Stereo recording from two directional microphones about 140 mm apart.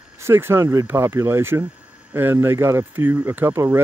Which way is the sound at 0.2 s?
15° right (ahead or behind).